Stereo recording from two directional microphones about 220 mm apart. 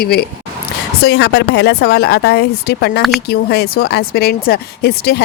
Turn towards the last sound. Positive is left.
turn(degrees=45)  # may be behind; listen again after turning